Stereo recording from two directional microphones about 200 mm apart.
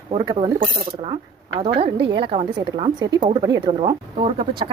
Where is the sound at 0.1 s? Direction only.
25° right (ahead or behind).